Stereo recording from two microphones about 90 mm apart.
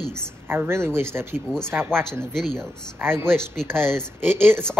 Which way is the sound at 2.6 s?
25° right (ahead or behind).